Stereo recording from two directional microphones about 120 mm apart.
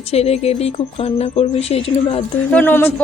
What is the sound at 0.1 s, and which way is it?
Speech, 60° left (ahead or behind).